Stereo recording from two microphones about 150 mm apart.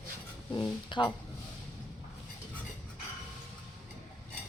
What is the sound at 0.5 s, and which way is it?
Speech, 30° left (ahead or behind).